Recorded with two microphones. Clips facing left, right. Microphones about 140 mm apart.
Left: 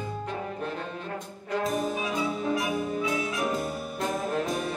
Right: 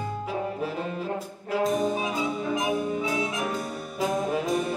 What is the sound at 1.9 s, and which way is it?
Music, 20° right (ahead or behind).